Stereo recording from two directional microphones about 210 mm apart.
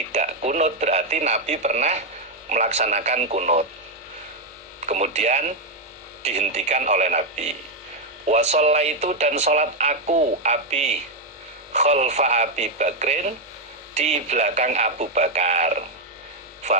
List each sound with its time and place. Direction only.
0.1 s speech: 35° right (ahead or behind)
4.9 s speech: 35° right (ahead or behind)